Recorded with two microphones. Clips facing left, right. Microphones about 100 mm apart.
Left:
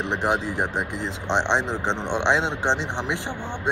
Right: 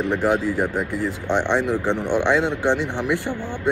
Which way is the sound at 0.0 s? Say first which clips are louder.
Right 4 dB; 20° left (ahead or behind).